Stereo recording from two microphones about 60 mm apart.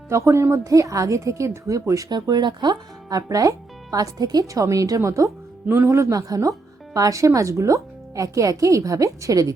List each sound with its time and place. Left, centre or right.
0.1 s a woman's voice: right
0.6 s a woman's voice: right
3.9 s speech: right
5.6 s a woman's voice: right
7.3 s speech: right